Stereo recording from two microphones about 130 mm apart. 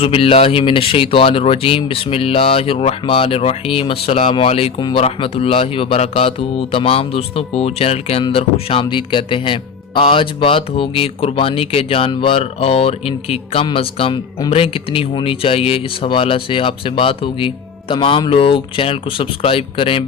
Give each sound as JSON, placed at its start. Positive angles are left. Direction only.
{"t": 0.0, "sound": "speech", "side_deg": 45}
{"t": 4.8, "sound": "speech", "side_deg": 40}